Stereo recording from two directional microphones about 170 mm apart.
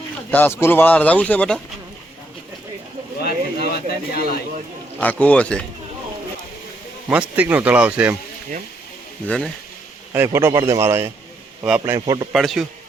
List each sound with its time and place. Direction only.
0.3 s speech: 10° left (ahead or behind)
3.2 s speech: 65° left (ahead or behind)
4.9 s speech: 10° left (ahead or behind)
7.1 s a man's voice: 5° right (ahead or behind)
9.2 s speech: 5° left (ahead or behind)
10.1 s a man's voice: 15° right (ahead or behind)
11.9 s speech: 25° right (ahead or behind)
12.3 s speech: centre (ahead or behind)